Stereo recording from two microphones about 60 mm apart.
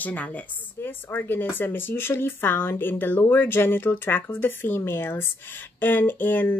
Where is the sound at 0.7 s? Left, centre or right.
Left.